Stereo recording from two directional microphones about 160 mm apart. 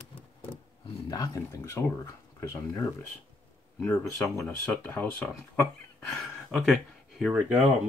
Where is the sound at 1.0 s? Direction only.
20° left (ahead or behind).